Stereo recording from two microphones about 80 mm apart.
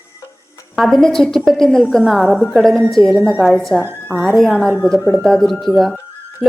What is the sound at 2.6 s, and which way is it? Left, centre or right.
Speech, centre.